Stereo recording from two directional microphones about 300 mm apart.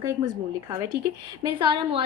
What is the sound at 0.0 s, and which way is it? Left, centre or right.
A woman's voice, centre.